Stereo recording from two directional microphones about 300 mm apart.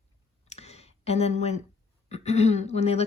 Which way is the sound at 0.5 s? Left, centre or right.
Left.